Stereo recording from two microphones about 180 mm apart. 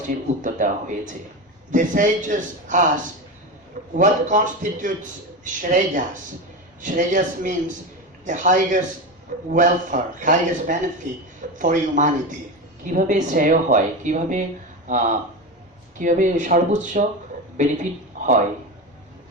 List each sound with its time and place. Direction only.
0.4 s speech: 45° right (ahead or behind)
3.9 s speech: 45° right (ahead or behind)